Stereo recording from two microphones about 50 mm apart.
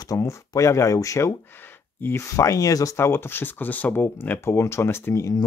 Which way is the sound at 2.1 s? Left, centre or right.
Left.